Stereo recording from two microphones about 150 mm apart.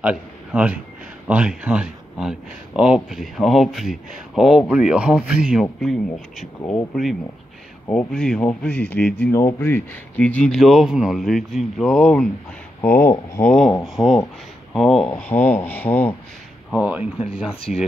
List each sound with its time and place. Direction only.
0.0 s a man's voice: 10° right (ahead or behind)
7.9 s speech: 5° left (ahead or behind)
12.8 s speech: 15° left (ahead or behind)
13.4 s speech: centre (ahead or behind)
15.0 s speech: 10° left (ahead or behind)
16.7 s speech: 10° right (ahead or behind)